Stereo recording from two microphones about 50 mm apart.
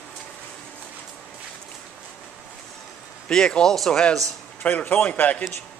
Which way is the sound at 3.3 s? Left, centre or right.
Centre.